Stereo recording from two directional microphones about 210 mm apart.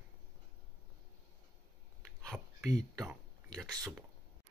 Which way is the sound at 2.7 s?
15° right (ahead or behind).